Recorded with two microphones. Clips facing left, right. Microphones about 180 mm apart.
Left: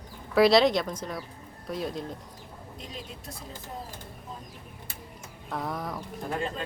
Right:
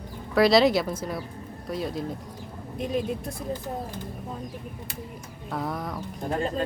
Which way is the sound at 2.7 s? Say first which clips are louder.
Right 16 dB; 55° right (ahead or behind).